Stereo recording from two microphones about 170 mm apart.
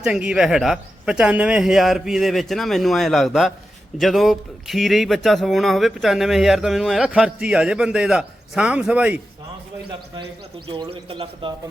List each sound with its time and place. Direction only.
0.0 s speech: 5° right (ahead or behind)
10.7 s a man's voice: 30° right (ahead or behind)